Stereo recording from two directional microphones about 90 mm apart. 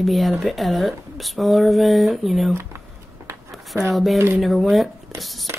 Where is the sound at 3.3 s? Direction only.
30° right (ahead or behind).